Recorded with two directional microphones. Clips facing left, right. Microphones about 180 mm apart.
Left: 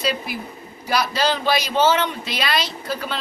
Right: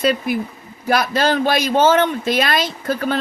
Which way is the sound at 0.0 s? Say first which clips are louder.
Right 7 dB; 50° right (ahead or behind).